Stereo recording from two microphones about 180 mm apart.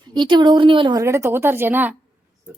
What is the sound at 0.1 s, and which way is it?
Speech, 25° right (ahead or behind).